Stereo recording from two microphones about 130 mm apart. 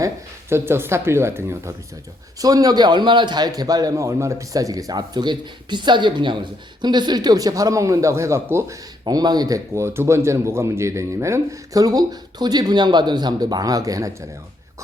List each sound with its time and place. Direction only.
0.5 s a man's voice: 20° right (ahead or behind)